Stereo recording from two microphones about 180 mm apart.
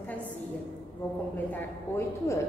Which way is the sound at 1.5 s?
15° left (ahead or behind).